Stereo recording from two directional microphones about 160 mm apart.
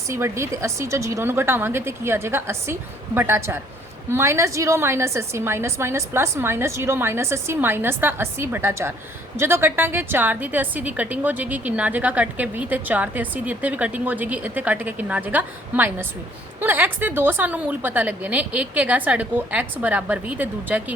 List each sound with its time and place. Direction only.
0.1 s a woman's voice: 15° right (ahead or behind)